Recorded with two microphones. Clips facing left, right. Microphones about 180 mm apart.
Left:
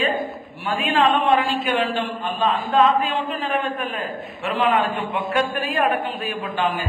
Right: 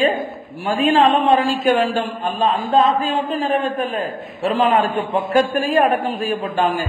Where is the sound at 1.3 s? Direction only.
40° right (ahead or behind).